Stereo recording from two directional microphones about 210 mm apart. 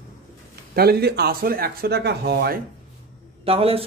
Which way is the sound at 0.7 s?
50° right (ahead or behind).